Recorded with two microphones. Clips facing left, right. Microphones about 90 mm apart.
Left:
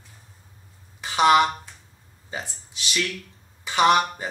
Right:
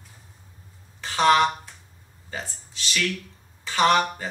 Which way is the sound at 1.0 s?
15° left (ahead or behind).